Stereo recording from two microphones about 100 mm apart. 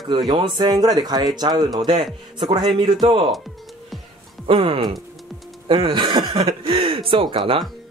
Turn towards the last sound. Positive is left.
turn(degrees=-60)  # may be behind; listen again after turning